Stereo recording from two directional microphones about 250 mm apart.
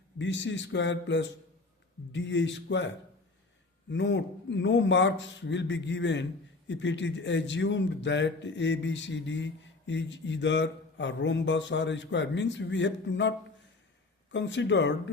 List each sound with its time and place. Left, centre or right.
0.2 s a man's voice: left